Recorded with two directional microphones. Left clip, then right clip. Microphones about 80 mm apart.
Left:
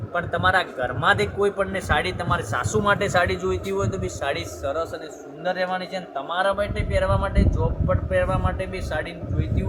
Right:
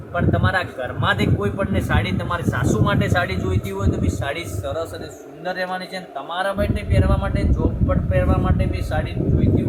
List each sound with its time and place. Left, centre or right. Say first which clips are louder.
0.1 s speech: even; left
5.5 s speech: even; left
6.1 s speech: even; centre
7.9 s speech: left 1 dB; left